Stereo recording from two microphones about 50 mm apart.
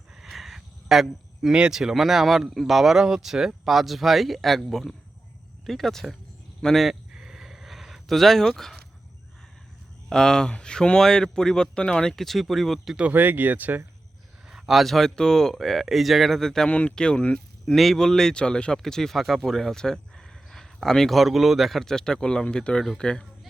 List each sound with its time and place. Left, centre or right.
0.2 s a sound: centre
1.5 s speech: centre
7.1 s a sound: centre
10.1 s speech: centre
13.1 s speech: right
14.5 s speech: centre
16.6 s speech: left
17.7 s speech: centre